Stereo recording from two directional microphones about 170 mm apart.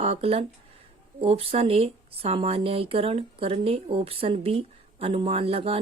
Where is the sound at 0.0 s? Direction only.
35° right (ahead or behind).